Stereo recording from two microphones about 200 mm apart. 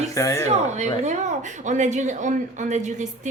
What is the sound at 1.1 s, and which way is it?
A woman's voice, 35° right (ahead or behind).